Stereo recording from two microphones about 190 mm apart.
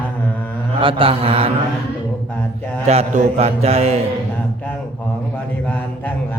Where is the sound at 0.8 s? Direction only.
30° right (ahead or behind).